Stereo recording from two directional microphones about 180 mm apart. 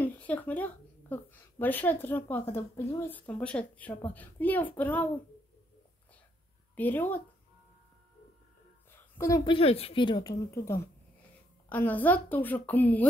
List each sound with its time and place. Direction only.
0.0 s a woman's voice: 10° left (ahead or behind)
6.7 s speech: 10° left (ahead or behind)
8.9 s a sound: 15° left (ahead or behind)
9.4 s a woman's voice: 30° left (ahead or behind); by 13.1 s 10° left (ahead or behind)